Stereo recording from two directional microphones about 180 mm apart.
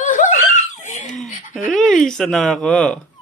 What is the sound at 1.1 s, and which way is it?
Speech, 5° left (ahead or behind).